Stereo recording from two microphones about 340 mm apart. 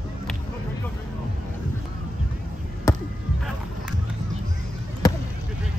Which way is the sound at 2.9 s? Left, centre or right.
Centre.